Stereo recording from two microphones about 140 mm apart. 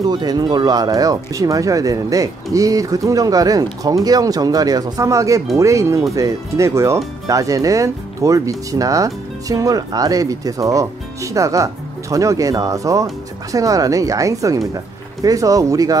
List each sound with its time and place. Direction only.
0.0 s speech: 30° right (ahead or behind)